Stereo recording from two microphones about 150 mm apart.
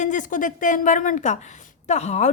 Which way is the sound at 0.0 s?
55° left (ahead or behind).